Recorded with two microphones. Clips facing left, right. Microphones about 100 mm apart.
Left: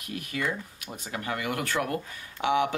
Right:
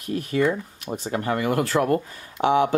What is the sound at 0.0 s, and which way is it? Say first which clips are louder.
Speech: right 10 dB; 35° right (ahead or behind).